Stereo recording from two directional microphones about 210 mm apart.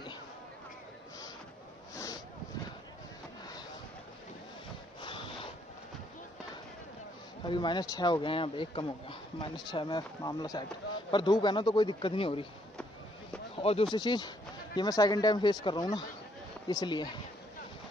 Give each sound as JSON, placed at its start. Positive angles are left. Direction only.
{"t": 5.0, "sound": "a sound", "side_deg": 25}
{"t": 7.4, "sound": "speech", "side_deg": 20}
{"t": 13.6, "sound": "speech", "side_deg": 25}